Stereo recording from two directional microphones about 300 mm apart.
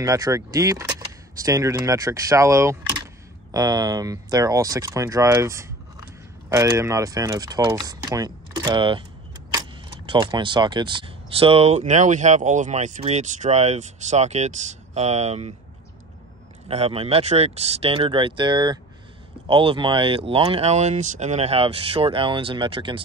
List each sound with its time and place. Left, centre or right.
0.0 s speech: centre
16.6 s speech: centre